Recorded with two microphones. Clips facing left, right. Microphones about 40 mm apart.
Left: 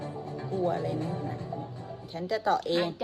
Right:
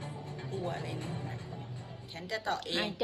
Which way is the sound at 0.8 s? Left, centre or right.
Right.